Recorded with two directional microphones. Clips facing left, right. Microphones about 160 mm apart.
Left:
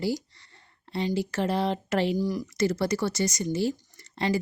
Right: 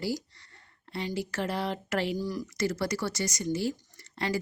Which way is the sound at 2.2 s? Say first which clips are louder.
Left 5 dB; 15° left (ahead or behind).